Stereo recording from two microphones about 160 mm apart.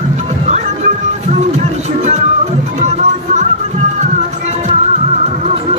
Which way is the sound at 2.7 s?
45° right (ahead or behind).